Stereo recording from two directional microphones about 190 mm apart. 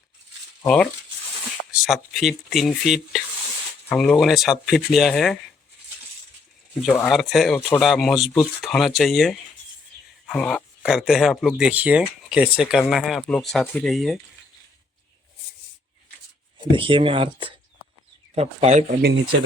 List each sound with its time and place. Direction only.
1.7 s speech: centre (ahead or behind)
6.9 s speech: 5° left (ahead or behind)
16.6 s speech: 25° right (ahead or behind)
19.0 s speech: 75° right (ahead or behind)